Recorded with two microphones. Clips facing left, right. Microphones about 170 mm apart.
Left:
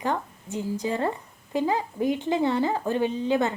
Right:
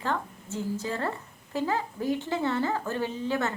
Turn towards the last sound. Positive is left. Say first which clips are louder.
# left 5 dB
turn(degrees=15)  # may be behind; listen again after turning